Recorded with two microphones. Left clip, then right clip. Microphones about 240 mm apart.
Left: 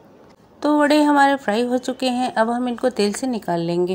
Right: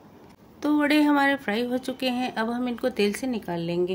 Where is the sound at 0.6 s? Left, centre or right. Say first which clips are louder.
Left 6 dB; centre.